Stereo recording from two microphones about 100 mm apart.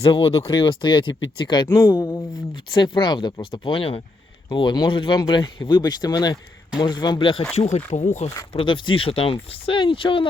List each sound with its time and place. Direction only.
0.0 s speech: 60° left (ahead or behind)
1.6 s speech: 25° left (ahead or behind)
1.9 s speech: 40° left (ahead or behind); by 4.0 s 70° left (ahead or behind)
4.4 s speech: 45° left (ahead or behind)
7.7 s speech: 90° left
8.5 s speech: 55° left (ahead or behind)